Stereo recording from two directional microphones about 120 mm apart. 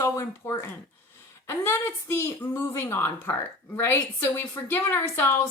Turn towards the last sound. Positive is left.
turn(degrees=20)  # may be behind; listen again after turning